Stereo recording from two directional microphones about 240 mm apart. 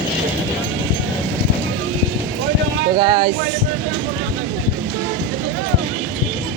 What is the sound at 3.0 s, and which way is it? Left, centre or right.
Speech, centre.